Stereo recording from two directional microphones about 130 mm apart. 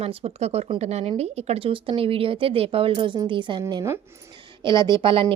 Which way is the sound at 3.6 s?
25° right (ahead or behind).